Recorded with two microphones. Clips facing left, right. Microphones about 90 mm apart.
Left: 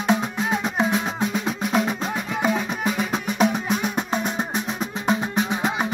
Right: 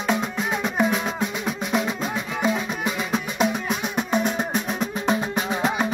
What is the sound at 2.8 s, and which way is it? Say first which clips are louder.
Music: left 1 dB; 40° left (ahead or behind).